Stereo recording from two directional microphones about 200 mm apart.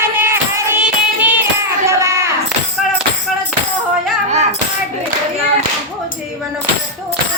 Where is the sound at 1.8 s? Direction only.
15° right (ahead or behind).